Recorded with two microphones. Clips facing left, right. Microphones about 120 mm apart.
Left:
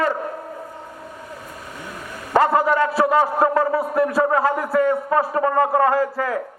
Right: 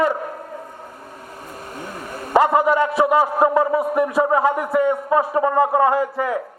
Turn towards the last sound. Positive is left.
turn(degrees=-15)  # may be behind; listen again after turning